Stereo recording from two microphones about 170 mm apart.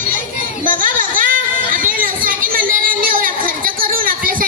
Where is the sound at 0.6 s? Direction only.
55° right (ahead or behind).